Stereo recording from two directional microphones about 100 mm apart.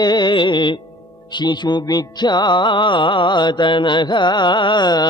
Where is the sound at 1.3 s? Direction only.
45° left (ahead or behind).